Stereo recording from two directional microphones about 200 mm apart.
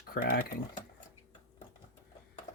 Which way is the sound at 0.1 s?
45° left (ahead or behind).